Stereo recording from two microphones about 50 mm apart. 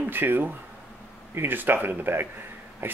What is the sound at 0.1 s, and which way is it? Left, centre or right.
Speech, right.